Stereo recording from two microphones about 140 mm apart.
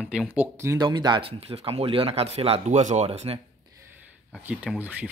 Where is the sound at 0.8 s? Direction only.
35° right (ahead or behind); by 3.3 s 50° right (ahead or behind).